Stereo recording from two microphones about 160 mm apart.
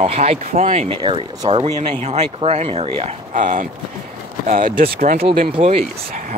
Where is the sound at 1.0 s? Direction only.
30° right (ahead or behind).